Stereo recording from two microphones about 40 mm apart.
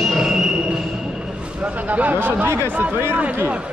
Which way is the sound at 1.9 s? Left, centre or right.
Right.